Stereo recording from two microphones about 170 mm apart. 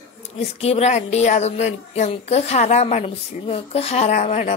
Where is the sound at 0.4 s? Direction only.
35° left (ahead or behind).